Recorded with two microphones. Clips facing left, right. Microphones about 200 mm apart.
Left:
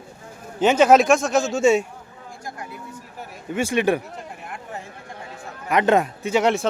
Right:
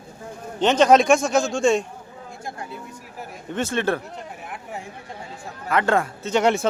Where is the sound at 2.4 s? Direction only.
25° right (ahead or behind).